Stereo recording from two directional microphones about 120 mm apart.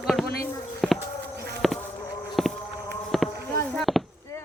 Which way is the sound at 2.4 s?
Centre (ahead or behind).